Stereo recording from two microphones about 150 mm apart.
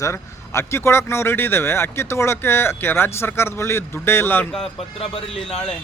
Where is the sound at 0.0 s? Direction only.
20° left (ahead or behind).